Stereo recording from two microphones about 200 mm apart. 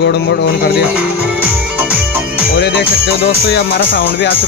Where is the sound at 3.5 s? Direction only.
55° left (ahead or behind).